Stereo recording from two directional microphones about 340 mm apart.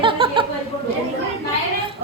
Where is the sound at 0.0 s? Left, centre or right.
Centre.